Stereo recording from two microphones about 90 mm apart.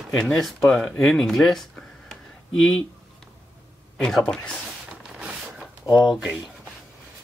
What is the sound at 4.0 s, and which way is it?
Speech, 5° left (ahead or behind).